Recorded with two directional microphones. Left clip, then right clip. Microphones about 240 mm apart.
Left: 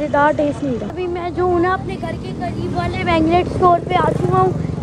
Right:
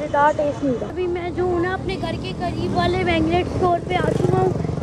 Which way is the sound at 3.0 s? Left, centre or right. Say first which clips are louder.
Left 5 dB; centre.